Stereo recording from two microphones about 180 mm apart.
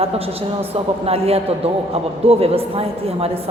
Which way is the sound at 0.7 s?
35° right (ahead or behind).